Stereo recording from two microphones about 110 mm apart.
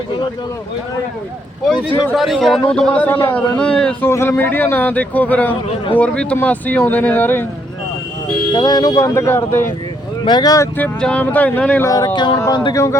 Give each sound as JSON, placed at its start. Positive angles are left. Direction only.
{"t": 1.6, "sound": "speech", "side_deg": -10}
{"t": 2.6, "sound": "speech", "side_deg": 10}
{"t": 3.6, "sound": "speech", "side_deg": 10}
{"t": 4.0, "sound": "speech", "side_deg": 25}
{"t": 8.5, "sound": "speech", "side_deg": 40}
{"t": 10.2, "sound": "speech", "side_deg": 40}
{"t": 10.8, "sound": "speech", "side_deg": 15}
{"t": 11.9, "sound": "speech", "side_deg": 30}
{"t": 12.1, "sound": "speech", "side_deg": 45}
{"t": 12.7, "sound": "speech", "side_deg": 25}